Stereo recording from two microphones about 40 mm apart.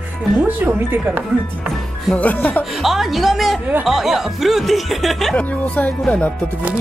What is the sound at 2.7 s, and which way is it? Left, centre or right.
Speech, centre.